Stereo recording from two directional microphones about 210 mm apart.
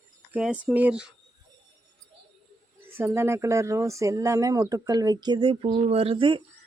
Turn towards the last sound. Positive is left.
turn(degrees=-25)  # may be behind; listen again after turning